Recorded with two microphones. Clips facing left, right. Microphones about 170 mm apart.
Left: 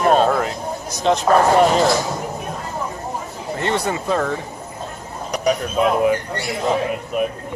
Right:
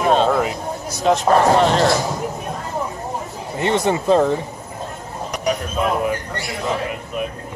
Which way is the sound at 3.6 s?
20° right (ahead or behind).